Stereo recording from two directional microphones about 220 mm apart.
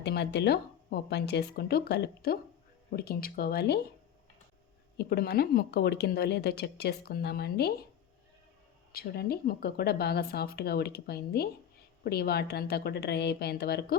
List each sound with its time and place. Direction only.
0.0 s speech: 50° left (ahead or behind)
4.9 s speech: 45° left (ahead or behind)
8.9 s speech: 45° left (ahead or behind)